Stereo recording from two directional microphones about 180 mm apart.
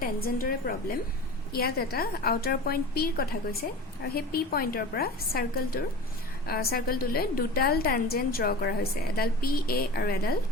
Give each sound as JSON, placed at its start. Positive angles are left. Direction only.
{"t": 0.0, "sound": "a woman's voice", "side_deg": 55}